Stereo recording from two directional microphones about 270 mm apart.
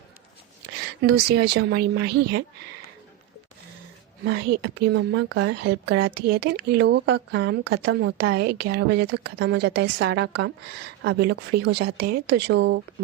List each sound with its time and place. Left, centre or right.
1.0 s a woman's voice: right
4.3 s a woman's voice: right